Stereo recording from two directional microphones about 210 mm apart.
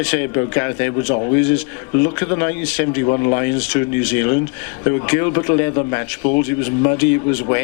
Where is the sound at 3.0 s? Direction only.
30° left (ahead or behind).